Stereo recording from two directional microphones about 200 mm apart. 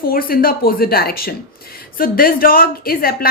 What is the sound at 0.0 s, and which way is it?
A woman's voice, 45° left (ahead or behind).